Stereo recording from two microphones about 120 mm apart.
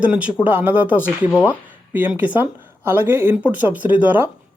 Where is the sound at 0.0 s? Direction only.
10° right (ahead or behind).